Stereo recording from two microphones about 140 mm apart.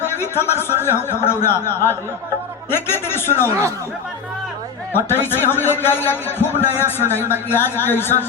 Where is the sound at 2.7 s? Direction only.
15° left (ahead or behind).